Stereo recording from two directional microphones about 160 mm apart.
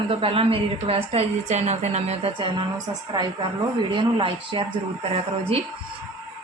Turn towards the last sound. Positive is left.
turn(degrees=-40)  # may be behind; listen again after turning